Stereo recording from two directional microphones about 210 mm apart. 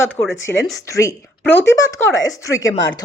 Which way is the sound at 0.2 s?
15° left (ahead or behind).